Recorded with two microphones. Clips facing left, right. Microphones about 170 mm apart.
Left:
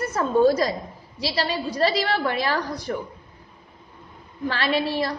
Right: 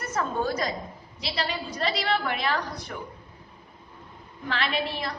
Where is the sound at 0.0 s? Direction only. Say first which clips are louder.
Left 9 dB; 30° left (ahead or behind).